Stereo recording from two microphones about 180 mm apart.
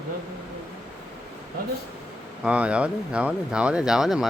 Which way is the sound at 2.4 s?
5° right (ahead or behind).